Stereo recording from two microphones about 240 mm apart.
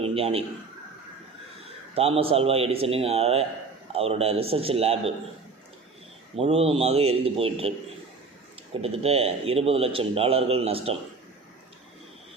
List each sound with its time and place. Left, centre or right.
0.0 s a man's voice: right
2.0 s a man's voice: right
6.4 s a man's voice: right
8.8 s a man's voice: right